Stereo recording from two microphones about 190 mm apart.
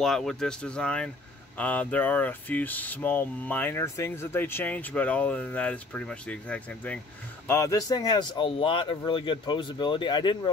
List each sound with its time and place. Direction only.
0.0 s speech: centre (ahead or behind); by 10.5 s 25° left (ahead or behind)